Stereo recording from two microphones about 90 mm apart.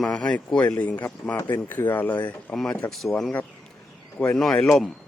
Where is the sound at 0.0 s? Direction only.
10° left (ahead or behind).